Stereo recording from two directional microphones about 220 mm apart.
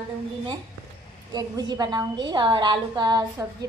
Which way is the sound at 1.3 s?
20° right (ahead or behind).